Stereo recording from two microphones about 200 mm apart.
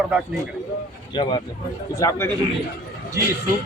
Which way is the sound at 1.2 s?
25° left (ahead or behind).